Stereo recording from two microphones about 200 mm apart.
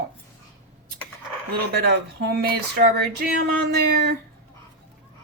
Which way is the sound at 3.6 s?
55° right (ahead or behind).